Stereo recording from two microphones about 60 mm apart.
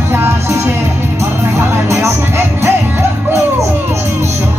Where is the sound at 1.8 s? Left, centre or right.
Right.